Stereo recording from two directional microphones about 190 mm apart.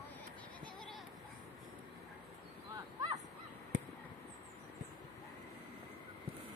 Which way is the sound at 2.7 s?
20° right (ahead or behind).